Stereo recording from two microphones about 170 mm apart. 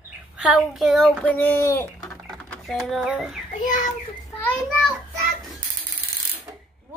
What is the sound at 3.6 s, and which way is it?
Speech, 50° left (ahead or behind).